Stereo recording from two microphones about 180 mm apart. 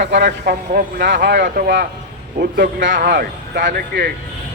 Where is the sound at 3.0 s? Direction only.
60° right (ahead or behind).